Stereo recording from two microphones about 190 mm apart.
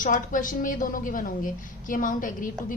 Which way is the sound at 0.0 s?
45° left (ahead or behind).